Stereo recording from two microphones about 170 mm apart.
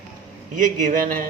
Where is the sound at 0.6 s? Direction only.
50° right (ahead or behind).